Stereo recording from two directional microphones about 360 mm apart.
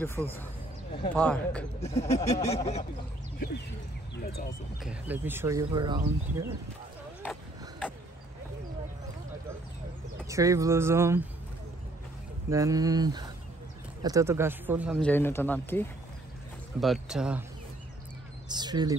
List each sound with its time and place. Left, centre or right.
0.0 s speech: centre
1.8 s speech: centre
4.1 s speech: left
4.7 s speech: centre
10.2 s speech: centre
12.4 s speech: centre
18.5 s speech: centre